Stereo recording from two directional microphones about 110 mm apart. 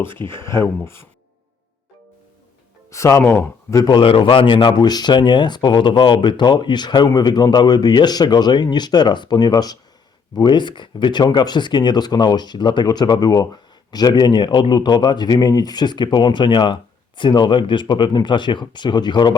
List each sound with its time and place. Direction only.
0.3 s speech: 25° left (ahead or behind)
2.9 s speech: 25° left (ahead or behind)
3.8 s speech: 50° left (ahead or behind)